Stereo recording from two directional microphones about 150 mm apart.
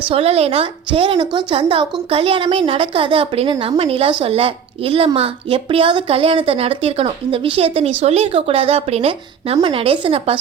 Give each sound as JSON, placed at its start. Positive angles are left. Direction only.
{"t": 0.1, "sound": "a woman's voice", "side_deg": -40}